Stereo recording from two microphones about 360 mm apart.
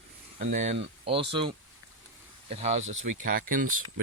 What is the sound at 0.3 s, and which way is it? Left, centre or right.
Speech, right.